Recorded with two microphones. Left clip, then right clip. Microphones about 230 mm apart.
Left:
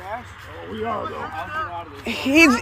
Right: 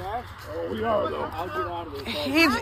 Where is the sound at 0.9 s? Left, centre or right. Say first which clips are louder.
Right 2 dB; left.